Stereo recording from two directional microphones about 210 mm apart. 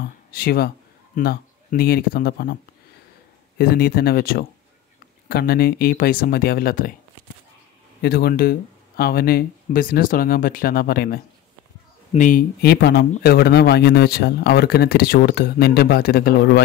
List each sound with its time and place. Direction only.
0.3 s speech: 50° left (ahead or behind)
3.5 s speech: 50° left (ahead or behind)
8.0 s speech: 50° left (ahead or behind)